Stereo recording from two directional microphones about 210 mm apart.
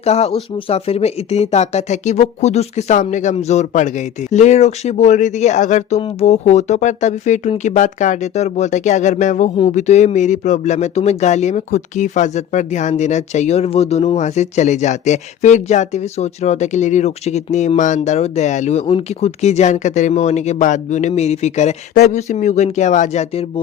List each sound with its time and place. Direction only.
0.0 s speech: 30° left (ahead or behind)